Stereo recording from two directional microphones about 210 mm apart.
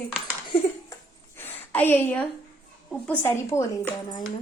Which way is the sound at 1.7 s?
10° left (ahead or behind).